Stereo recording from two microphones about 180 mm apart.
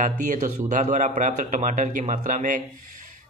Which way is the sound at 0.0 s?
45° right (ahead or behind).